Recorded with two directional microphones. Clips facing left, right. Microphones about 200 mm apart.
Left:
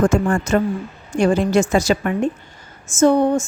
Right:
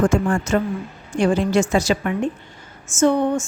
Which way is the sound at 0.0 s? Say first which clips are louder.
Left 2 dB; 45° left (ahead or behind).